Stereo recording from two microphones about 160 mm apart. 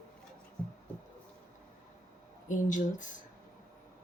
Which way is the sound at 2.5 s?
55° left (ahead or behind).